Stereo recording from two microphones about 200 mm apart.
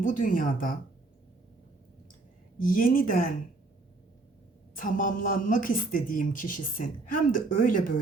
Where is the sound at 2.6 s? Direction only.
45° left (ahead or behind).